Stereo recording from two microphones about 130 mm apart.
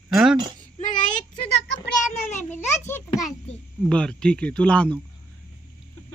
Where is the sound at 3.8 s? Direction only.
5° left (ahead or behind).